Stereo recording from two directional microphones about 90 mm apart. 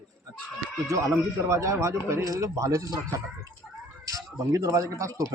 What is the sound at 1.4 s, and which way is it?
A man's voice, 35° right (ahead or behind).